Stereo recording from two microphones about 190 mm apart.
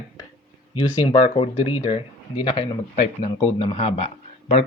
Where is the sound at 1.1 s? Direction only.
30° left (ahead or behind).